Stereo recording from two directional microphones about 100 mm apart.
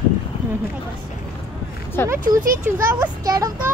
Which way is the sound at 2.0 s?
30° right (ahead or behind).